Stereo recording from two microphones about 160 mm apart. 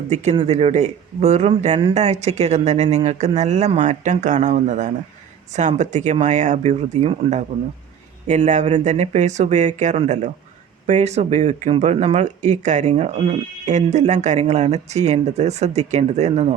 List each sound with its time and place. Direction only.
0.3 s speech: 40° right (ahead or behind)